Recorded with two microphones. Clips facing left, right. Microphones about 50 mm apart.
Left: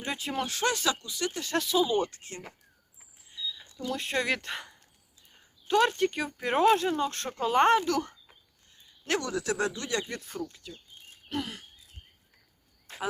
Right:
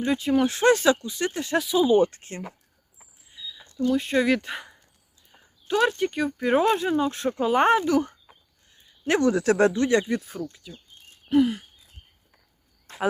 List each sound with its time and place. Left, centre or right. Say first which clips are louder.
0.0 s speech: right 10 dB; centre
0.3 s speech: right 10 dB; right
1.5 s speech: right 7 dB; centre; by 2.4 s right
3.0 s cricket: left 3 dB; centre
3.6 s speech: right 12 dB; centre
5.3 s a sound: even; centre
6.0 s speech: right 4 dB; centre
9.0 s speech: right 9 dB; right
10.1 s speech: right 8 dB; centre